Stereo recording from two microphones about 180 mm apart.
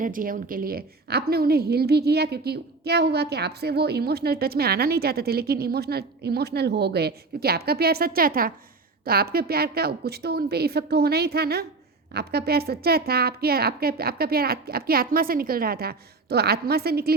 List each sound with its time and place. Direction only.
0.0 s a woman's voice: 50° right (ahead or behind)